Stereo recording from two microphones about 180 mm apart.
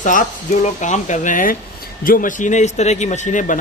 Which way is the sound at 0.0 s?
45° left (ahead or behind).